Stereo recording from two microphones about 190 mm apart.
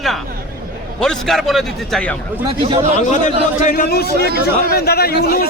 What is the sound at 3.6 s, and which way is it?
A man's voice, 45° left (ahead or behind).